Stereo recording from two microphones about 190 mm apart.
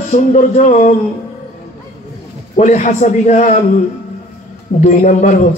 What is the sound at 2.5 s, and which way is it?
A man's voice, 40° left (ahead or behind).